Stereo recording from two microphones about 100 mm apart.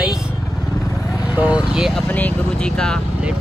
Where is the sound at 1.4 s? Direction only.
10° right (ahead or behind).